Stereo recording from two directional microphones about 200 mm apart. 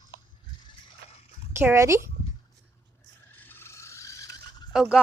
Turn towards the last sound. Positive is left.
turn(degrees=0)  # may be behind; listen again after turning